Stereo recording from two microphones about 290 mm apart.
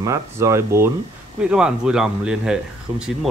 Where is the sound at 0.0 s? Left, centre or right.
Centre.